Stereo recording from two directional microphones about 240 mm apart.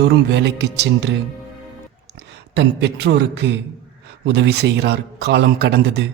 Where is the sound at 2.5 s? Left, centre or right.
Right.